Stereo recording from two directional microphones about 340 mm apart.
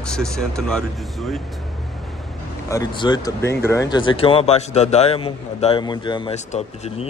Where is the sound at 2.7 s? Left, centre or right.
Centre.